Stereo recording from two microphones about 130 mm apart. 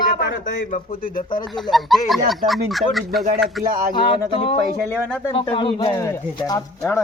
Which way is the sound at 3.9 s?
45° left (ahead or behind).